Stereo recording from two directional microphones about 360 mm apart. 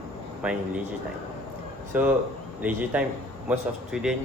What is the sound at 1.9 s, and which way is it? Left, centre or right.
A man's voice, centre.